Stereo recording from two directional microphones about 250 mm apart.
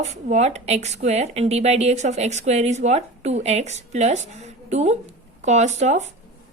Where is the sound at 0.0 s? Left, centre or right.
Right.